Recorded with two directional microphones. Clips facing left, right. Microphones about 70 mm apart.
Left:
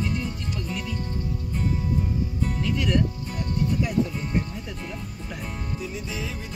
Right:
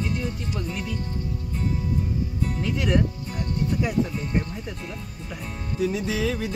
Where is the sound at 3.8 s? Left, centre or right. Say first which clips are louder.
Even; right.